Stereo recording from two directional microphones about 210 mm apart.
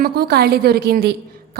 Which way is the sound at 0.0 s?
50° right (ahead or behind).